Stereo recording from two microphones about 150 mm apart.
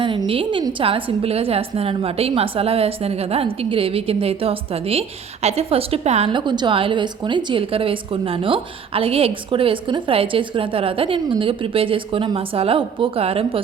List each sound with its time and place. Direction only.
0.0 s a woman's voice: 35° right (ahead or behind)
6.3 s a woman's voice: 30° right (ahead or behind)